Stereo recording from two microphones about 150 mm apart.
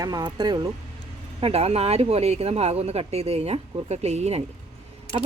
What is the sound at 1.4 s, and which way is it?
Speech, 40° right (ahead or behind).